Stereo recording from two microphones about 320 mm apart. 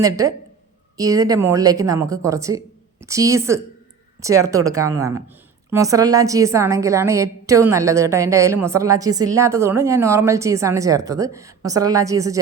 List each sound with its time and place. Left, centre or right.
0.0 s a woman's voice: centre